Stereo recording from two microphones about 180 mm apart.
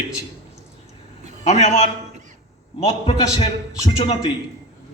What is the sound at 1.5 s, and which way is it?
Speech, 40° left (ahead or behind).